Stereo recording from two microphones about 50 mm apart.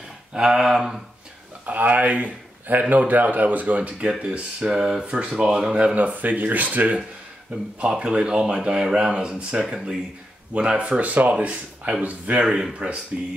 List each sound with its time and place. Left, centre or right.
0.3 s speech: centre
1.7 s speech: right
4.6 s speech: centre
5.0 s speech: right
5.9 s speech: right
7.8 s speech: centre
12.4 s speech: centre
12.7 s speech: right